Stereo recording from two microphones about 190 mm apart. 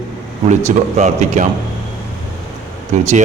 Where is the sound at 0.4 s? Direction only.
40° right (ahead or behind).